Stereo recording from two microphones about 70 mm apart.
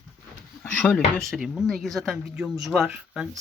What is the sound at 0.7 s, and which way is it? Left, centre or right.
Speech, centre.